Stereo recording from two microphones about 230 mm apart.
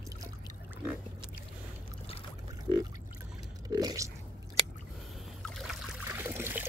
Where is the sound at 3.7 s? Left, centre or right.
Centre.